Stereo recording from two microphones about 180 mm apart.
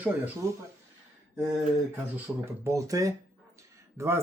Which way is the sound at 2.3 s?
10° right (ahead or behind).